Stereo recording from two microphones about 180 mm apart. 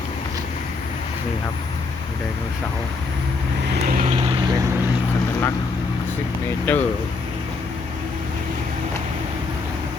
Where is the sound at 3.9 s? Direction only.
50° right (ahead or behind).